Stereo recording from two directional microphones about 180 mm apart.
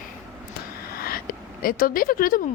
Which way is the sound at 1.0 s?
55° left (ahead or behind).